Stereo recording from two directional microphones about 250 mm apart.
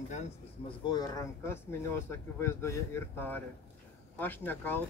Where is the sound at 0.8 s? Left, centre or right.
Centre.